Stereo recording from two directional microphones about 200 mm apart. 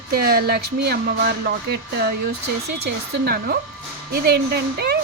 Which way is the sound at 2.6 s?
50° right (ahead or behind).